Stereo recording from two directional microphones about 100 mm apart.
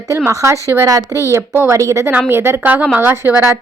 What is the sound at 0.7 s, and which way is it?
Speech, 40° right (ahead or behind).